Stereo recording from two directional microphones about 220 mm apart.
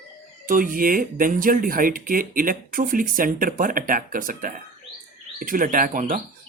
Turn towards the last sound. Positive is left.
turn(degrees=-35)  # may be behind; listen again after turning